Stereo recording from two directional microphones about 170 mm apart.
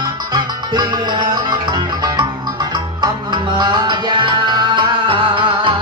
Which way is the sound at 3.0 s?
25° right (ahead or behind).